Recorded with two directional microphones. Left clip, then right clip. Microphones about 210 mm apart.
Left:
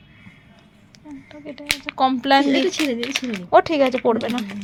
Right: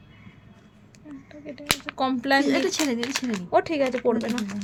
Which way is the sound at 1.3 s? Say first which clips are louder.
Left 2 dB; 5° left (ahead or behind).